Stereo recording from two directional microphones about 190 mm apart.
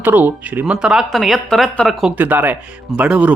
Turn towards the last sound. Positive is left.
turn(degrees=-5)  # may be behind; listen again after turning